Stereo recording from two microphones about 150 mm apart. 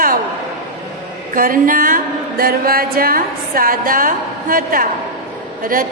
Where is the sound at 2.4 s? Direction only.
80° right.